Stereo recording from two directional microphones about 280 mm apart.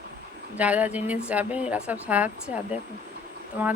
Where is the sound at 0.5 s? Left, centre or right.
Centre.